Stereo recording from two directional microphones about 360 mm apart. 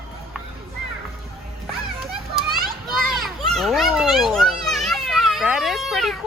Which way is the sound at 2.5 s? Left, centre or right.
Centre.